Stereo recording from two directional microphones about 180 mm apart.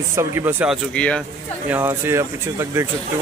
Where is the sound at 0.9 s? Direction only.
5° left (ahead or behind).